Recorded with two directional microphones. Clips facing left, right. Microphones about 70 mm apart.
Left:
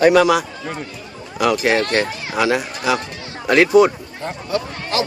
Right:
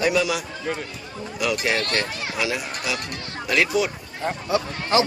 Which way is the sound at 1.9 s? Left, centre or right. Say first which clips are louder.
Left 6 dB; left.